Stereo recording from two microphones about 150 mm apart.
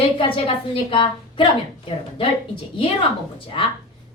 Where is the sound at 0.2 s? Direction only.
35° left (ahead or behind).